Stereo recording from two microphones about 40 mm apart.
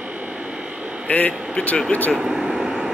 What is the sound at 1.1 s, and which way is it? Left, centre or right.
Speech, left.